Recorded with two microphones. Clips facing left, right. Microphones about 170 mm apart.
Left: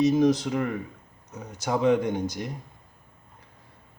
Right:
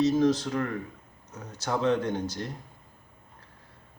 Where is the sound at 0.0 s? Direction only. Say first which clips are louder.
Left 2 dB; 15° left (ahead or behind).